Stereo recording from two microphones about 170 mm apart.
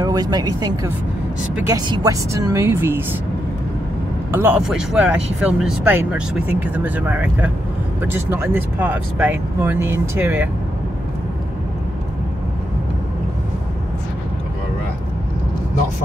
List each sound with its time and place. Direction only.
0.0 s speech: 20° right (ahead or behind)
4.3 s speech: 10° right (ahead or behind)